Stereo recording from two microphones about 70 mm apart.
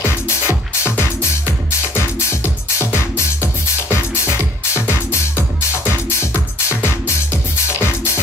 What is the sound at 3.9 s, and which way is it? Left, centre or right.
Music, left.